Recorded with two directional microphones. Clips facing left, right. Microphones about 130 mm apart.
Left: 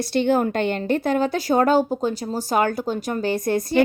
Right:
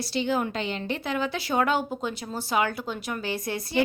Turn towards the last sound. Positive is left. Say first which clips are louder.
# left 9 dB
turn(degrees=45)  # may be behind; listen again after turning